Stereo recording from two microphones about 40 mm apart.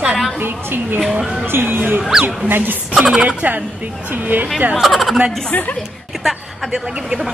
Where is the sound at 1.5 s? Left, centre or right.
Right.